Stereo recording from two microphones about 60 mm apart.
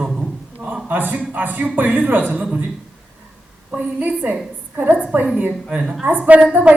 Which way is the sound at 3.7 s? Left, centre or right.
Right.